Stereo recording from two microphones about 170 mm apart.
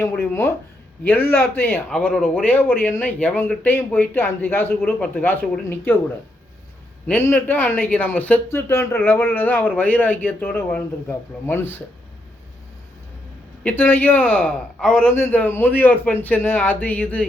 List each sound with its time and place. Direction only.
0.0 s speech: 15° left (ahead or behind)
7.4 s speech: 10° left (ahead or behind)
13.7 s speech: 10° left (ahead or behind)